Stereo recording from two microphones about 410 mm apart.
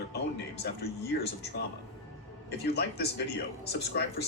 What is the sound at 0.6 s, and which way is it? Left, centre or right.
Speech, left.